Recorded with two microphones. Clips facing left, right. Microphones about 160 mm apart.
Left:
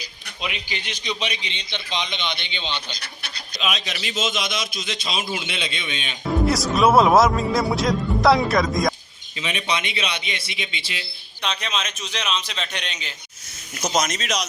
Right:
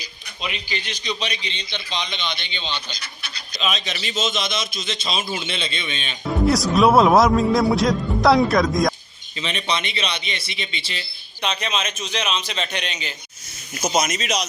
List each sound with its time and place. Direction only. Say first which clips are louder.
0.4 s a man's voice: right 1 dB; 15° left (ahead or behind)
3.6 s a man's voice: right 1 dB; 10° left (ahead or behind)
6.4 s a man's voice: right 3 dB; centre (ahead or behind)
11.4 s a man's voice: right 2 dB; centre (ahead or behind)